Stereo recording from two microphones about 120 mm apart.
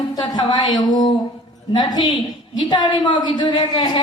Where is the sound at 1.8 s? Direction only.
35° left (ahead or behind).